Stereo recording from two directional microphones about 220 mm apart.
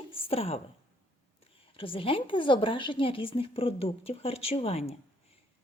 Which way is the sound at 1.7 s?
25° left (ahead or behind).